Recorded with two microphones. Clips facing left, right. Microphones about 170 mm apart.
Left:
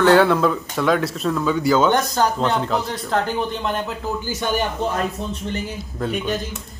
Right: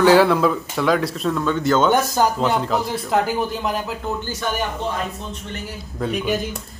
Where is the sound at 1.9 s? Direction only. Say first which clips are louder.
Right 1 dB; 5° right (ahead or behind).